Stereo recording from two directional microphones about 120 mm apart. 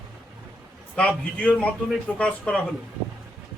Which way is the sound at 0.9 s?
10° left (ahead or behind).